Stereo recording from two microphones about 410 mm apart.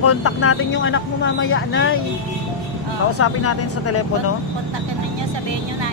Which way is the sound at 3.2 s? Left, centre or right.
Left.